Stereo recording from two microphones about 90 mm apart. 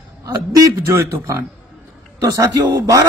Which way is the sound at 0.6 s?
40° right (ahead or behind).